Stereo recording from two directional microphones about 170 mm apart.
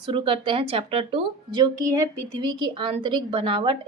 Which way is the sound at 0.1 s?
30° right (ahead or behind).